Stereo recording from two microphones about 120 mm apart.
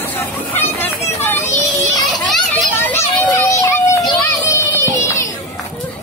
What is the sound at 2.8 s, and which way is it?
Children playing, 20° left (ahead or behind).